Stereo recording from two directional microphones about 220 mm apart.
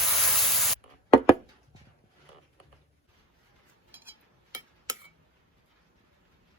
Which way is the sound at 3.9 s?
10° right (ahead or behind).